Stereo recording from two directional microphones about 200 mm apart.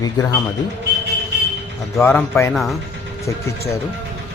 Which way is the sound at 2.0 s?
10° left (ahead or behind).